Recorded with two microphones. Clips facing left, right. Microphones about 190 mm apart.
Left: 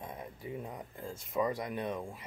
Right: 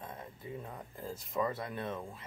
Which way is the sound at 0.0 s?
15° left (ahead or behind).